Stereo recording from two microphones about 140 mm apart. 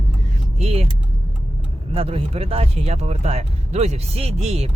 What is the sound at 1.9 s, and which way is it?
Speech, 45° right (ahead or behind).